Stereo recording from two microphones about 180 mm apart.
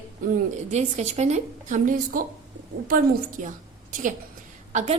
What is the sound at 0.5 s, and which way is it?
A woman's voice, 40° right (ahead or behind).